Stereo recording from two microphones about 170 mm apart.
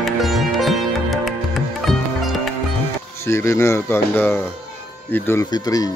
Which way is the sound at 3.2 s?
15° left (ahead or behind).